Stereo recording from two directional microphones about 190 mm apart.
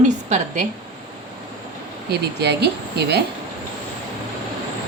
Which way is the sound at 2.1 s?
60° right (ahead or behind).